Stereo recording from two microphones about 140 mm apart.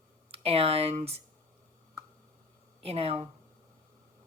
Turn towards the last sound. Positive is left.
turn(degrees=-45)  # may be behind; listen again after turning